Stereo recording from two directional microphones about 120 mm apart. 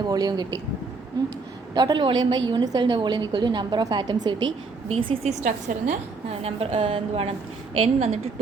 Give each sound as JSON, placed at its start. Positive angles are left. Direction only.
{"t": 0.0, "sound": "a woman's voice", "side_deg": -35}
{"t": 1.7, "sound": "a woman's voice", "side_deg": -35}
{"t": 4.9, "sound": "a woman's voice", "side_deg": -50}
{"t": 5.3, "sound": "a woman's voice", "side_deg": -85}